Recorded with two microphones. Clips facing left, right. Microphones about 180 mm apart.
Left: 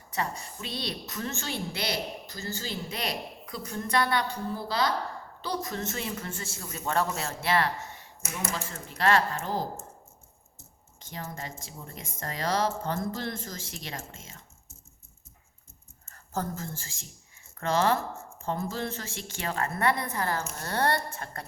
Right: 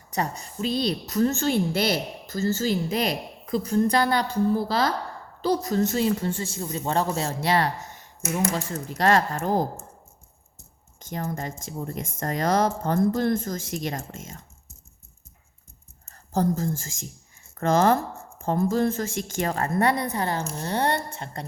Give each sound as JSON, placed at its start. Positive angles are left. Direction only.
{"t": 0.1, "sound": "a woman's voice", "side_deg": -40}
{"t": 11.0, "sound": "speech", "side_deg": -45}
{"t": 16.0, "sound": "a woman's voice", "side_deg": -35}